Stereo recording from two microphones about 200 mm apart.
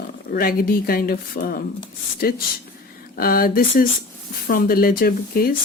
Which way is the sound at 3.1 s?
50° left (ahead or behind).